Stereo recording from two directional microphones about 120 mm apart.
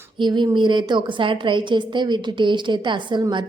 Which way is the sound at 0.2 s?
40° right (ahead or behind).